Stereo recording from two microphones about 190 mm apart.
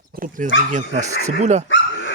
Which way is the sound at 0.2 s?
45° right (ahead or behind).